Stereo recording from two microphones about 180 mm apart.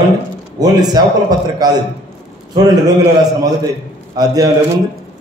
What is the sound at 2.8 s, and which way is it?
Speech, 20° right (ahead or behind).